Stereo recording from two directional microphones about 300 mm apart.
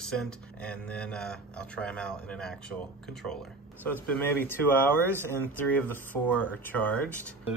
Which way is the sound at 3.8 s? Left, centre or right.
Centre.